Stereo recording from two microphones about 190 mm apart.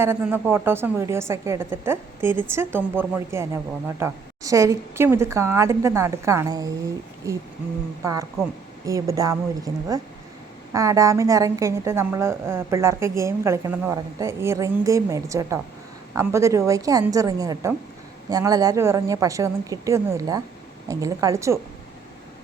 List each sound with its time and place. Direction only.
0.0 s a woman's voice: 10° right (ahead or behind)
8.0 s a woman's voice: 15° right (ahead or behind)